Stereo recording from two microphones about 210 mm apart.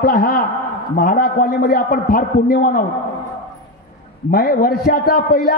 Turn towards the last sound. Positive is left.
turn(degrees=45)  # may be behind; listen again after turning